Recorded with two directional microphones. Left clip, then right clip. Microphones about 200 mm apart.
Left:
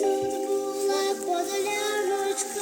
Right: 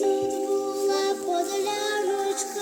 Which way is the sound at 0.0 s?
55° right (ahead or behind).